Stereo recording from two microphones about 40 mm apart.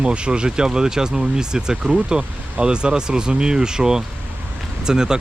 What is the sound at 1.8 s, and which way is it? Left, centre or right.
Speech, right.